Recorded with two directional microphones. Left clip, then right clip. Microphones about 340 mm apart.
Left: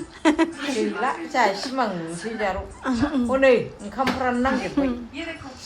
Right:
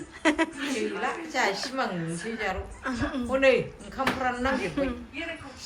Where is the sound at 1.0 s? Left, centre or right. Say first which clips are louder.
Left 6 dB; left.